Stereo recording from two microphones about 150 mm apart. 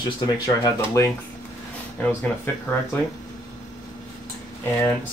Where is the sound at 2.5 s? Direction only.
15° left (ahead or behind).